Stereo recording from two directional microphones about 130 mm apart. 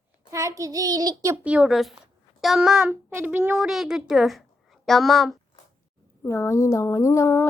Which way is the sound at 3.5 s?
5° right (ahead or behind).